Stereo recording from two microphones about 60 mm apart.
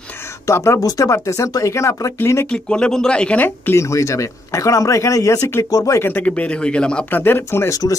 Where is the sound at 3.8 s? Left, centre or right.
Left.